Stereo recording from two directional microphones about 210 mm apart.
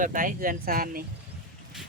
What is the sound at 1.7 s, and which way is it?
Vehicle, centre (ahead or behind).